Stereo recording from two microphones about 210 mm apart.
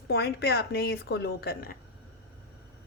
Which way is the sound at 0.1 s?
50° left (ahead or behind).